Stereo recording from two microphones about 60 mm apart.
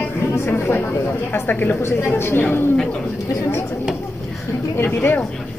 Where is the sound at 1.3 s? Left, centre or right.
Left.